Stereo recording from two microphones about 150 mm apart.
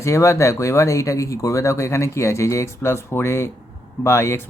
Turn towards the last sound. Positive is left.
turn(degrees=20)  # may be behind; listen again after turning